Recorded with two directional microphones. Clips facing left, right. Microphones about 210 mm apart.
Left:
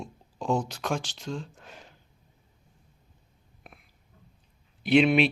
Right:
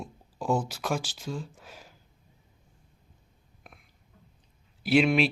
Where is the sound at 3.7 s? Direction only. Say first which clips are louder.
Left 1 dB; centre (ahead or behind).